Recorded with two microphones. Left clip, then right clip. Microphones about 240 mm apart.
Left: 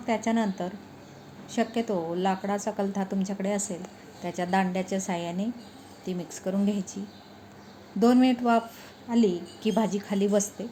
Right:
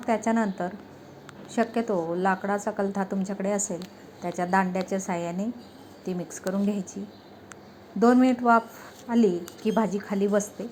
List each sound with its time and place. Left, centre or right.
0.0 s a woman's voice: centre
6.5 s a woman's voice: centre
7.9 s a woman's voice: centre
9.0 s a woman's voice: centre
9.6 s a woman's voice: centre